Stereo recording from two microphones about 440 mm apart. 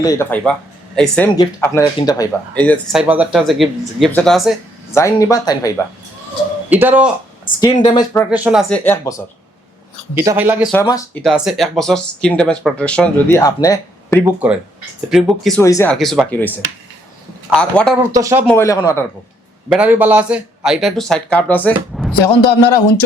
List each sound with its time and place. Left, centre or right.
0.0 s speech: centre
6.7 s speech: centre
7.6 s speech: centre
10.2 s speech: centre
17.5 s speech: centre
19.7 s speech: centre
22.2 s speech: left